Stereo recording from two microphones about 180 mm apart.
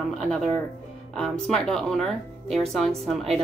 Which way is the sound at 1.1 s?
5° left (ahead or behind).